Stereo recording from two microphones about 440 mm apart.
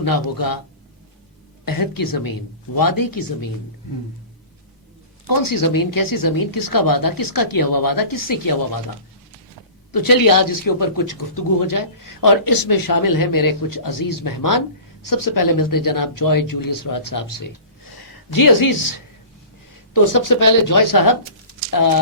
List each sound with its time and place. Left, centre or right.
0.0 s speech: left
1.6 s speech: left
5.2 s speech: left
9.9 s speech: left
19.9 s speech: left